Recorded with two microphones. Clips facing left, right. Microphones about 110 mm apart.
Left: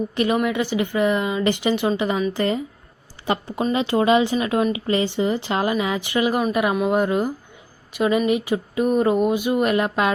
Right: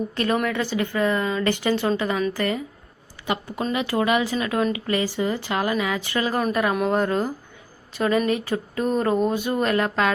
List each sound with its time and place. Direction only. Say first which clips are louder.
0.1 s speech: left 4 dB; 15° left (ahead or behind)
3.2 s a sound: left 3 dB; 30° left (ahead or behind)
3.7 s speech: left 4 dB; 25° left (ahead or behind)